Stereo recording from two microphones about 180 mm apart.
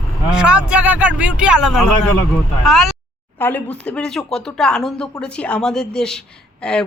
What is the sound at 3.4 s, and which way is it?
Speech, 10° left (ahead or behind).